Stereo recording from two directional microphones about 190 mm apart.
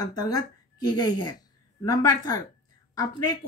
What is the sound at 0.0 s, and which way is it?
A woman's voice, 20° left (ahead or behind).